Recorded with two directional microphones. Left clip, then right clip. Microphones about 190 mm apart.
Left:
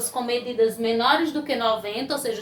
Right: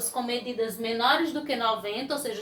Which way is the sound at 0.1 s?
20° left (ahead or behind).